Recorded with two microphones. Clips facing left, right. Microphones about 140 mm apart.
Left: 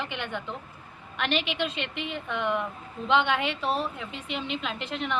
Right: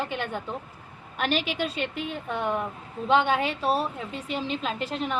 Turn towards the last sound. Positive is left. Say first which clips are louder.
# right 3 dB
turn(degrees=-35)  # may be behind; listen again after turning